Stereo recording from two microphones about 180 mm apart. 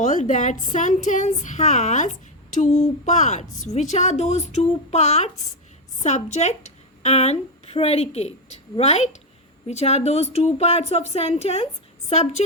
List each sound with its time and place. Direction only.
0.0 s a woman's voice: 45° left (ahead or behind)